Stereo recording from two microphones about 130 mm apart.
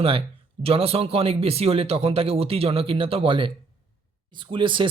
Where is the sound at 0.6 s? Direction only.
50° right (ahead or behind).